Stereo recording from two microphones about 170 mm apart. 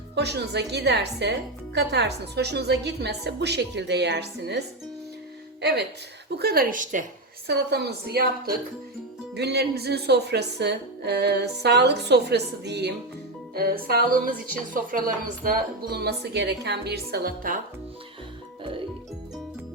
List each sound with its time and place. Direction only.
0.2 s a woman's voice: 80° right
6.4 s speech: 60° right (ahead or behind)
7.4 s speech: 75° right (ahead or behind)
9.3 s speech: 80° right
13.5 s speech: 65° right (ahead or behind)